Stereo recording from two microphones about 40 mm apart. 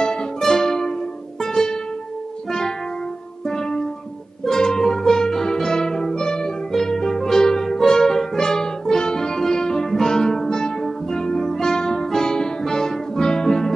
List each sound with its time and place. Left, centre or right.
0.0 s music: centre
3.4 s music: centre